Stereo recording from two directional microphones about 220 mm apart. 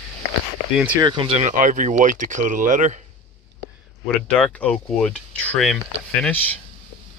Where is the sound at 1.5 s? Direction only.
35° right (ahead or behind).